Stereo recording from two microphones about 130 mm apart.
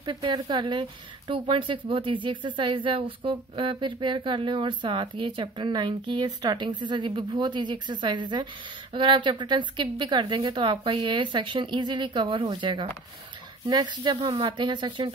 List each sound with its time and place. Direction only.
0.0 s speech: 35° right (ahead or behind)